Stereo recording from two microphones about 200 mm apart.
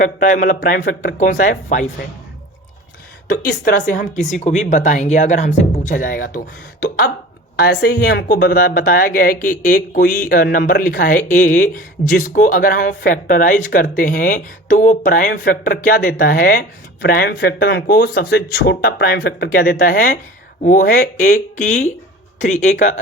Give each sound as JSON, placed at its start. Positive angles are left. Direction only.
{"t": 0.0, "sound": "speech", "side_deg": 40}
{"t": 3.2, "sound": "speech", "side_deg": 45}